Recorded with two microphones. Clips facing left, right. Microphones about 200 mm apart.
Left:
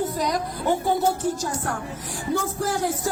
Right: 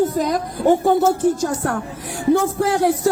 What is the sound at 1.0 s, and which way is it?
A woman's voice, 65° right (ahead or behind).